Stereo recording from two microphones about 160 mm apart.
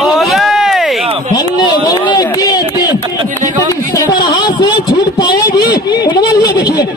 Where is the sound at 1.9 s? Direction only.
25° left (ahead or behind).